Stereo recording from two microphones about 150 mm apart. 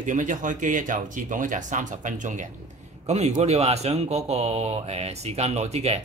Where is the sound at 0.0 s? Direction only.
60° right (ahead or behind).